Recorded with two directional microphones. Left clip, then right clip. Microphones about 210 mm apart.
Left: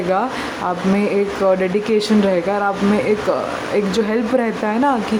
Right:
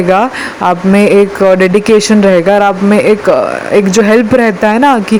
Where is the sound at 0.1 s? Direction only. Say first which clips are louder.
Right 8 dB; 35° right (ahead or behind).